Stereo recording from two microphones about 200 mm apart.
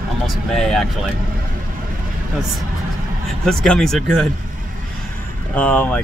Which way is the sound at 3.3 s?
Centre (ahead or behind).